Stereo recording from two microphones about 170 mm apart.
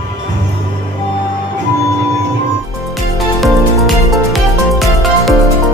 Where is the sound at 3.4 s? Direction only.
Centre (ahead or behind).